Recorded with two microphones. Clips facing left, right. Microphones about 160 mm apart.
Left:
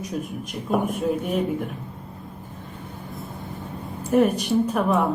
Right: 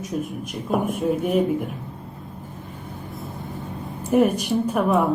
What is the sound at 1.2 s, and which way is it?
Speech, 10° right (ahead or behind).